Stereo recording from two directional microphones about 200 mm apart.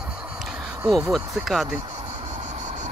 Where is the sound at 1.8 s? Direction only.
25° right (ahead or behind).